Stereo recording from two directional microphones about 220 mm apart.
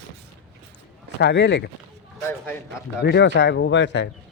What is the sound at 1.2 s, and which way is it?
Speech, 50° left (ahead or behind).